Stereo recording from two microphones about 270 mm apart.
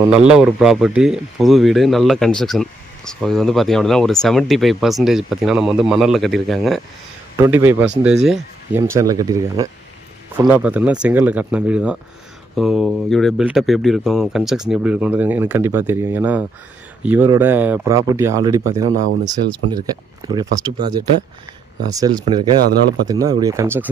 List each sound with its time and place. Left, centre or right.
0.3 s speech: centre
20.2 s speech: centre